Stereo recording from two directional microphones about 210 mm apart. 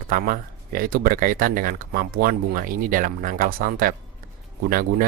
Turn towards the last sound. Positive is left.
turn(degrees=-45)  # may be behind; listen again after turning